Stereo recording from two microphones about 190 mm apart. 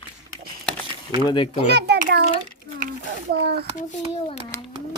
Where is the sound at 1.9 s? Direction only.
45° right (ahead or behind).